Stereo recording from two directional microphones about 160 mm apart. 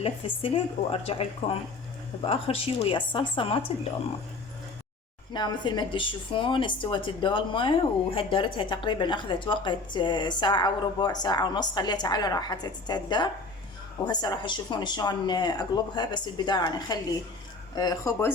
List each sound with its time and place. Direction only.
0.0 s speech: 35° left (ahead or behind)
5.3 s a woman's voice: 25° left (ahead or behind)